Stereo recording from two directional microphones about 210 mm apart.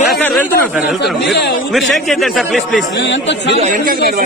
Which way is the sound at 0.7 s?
5° right (ahead or behind).